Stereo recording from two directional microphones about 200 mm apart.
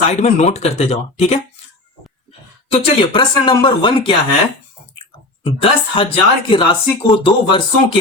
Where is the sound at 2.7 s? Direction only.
25° left (ahead or behind).